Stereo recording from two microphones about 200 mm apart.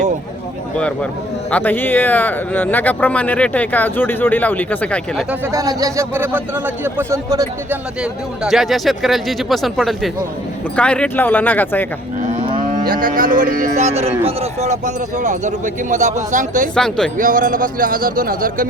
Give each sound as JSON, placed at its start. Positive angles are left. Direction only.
{"t": 1.5, "sound": "speech", "side_deg": 10}
{"t": 5.3, "sound": "speech", "side_deg": -15}
{"t": 8.4, "sound": "speech", "side_deg": 0}
{"t": 12.3, "sound": "moo", "side_deg": -35}
{"t": 16.7, "sound": "speech", "side_deg": 5}
{"t": 17.2, "sound": "speech", "side_deg": -40}